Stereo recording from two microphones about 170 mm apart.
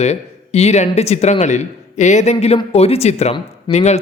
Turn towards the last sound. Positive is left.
turn(degrees=40)  # may be behind; listen again after turning